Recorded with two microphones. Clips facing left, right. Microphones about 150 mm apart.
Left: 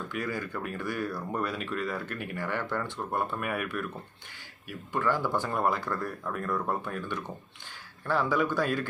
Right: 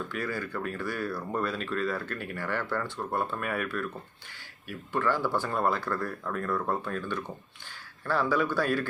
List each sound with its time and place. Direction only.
0.1 s speech: 15° left (ahead or behind)